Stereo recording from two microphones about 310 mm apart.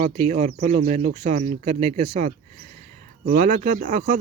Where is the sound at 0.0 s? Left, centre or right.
Right.